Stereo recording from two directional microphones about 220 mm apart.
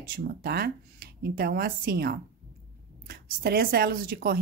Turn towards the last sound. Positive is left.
turn(degrees=-45)  # may be behind; listen again after turning